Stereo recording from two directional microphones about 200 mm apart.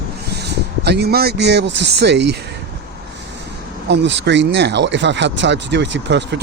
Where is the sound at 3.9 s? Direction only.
60° right (ahead or behind).